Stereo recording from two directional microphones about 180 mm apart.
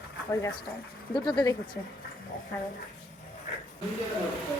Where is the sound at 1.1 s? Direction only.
25° left (ahead or behind).